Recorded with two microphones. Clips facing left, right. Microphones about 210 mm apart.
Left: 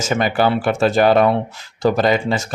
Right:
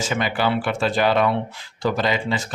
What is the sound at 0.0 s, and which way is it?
Speech, 45° left (ahead or behind).